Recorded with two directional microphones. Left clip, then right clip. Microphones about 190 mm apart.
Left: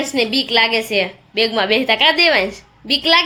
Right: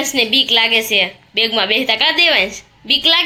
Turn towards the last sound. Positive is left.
turn(degrees=15)  # may be behind; listen again after turning